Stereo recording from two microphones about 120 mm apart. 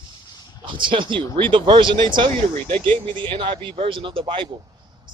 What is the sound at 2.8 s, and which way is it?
Speech, 10° left (ahead or behind).